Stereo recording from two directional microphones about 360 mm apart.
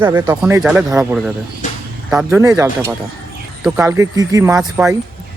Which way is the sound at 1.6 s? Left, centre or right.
Left.